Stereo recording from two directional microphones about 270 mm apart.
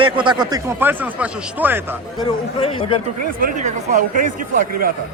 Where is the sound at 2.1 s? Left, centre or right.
Centre.